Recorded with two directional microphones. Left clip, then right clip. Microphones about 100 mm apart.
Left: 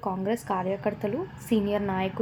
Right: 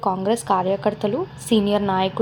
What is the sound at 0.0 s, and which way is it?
A woman's voice, 20° right (ahead or behind).